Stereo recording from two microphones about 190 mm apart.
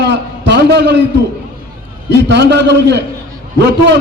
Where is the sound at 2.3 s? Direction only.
65° right (ahead or behind).